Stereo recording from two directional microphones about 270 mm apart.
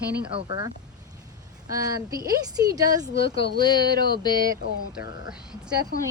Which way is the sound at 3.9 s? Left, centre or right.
Right.